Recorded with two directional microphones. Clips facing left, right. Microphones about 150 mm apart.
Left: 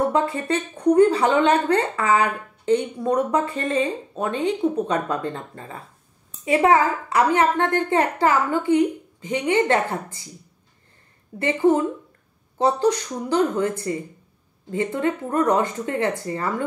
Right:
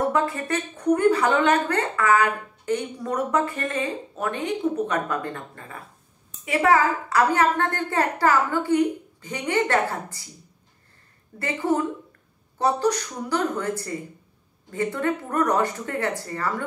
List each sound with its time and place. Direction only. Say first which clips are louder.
0.1 s a woman's voice: left 2 dB; 25° left (ahead or behind)
11.3 s a woman's voice: left 5 dB; 20° left (ahead or behind)